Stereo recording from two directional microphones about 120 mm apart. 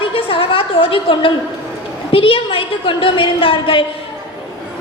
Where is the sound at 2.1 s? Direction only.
45° left (ahead or behind).